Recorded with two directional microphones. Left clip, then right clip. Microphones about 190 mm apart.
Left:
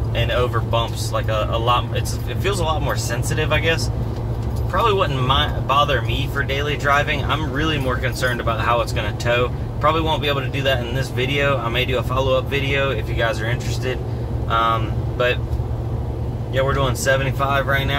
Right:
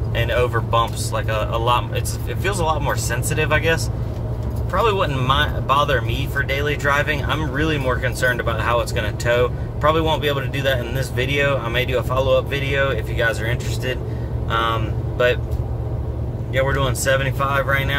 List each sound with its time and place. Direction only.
0.3 s speech: 20° right (ahead or behind)
4.7 s speech: 20° right (ahead or behind)
14.5 s speech: 15° right (ahead or behind)
16.5 s speech: 25° right (ahead or behind)